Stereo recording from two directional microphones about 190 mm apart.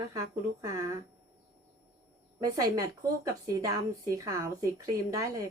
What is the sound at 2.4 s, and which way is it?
Speech, 20° right (ahead or behind).